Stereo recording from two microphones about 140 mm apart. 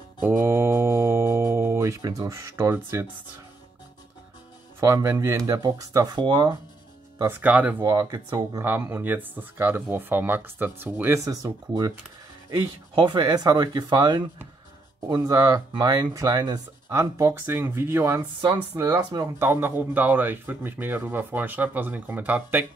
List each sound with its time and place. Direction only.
0.2 s mantra: 15° right (ahead or behind)
4.7 s speech: 20° right (ahead or behind)
7.2 s speech: 10° right (ahead or behind)
7.8 s speech: 20° right (ahead or behind)
8.6 s speech: 15° right (ahead or behind)